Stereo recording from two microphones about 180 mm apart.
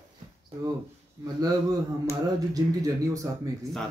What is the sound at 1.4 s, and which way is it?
Speech, 20° right (ahead or behind).